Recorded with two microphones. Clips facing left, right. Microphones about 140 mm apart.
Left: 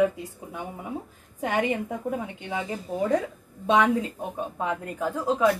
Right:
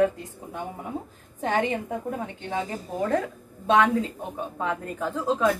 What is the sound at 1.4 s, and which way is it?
Speech, 10° left (ahead or behind).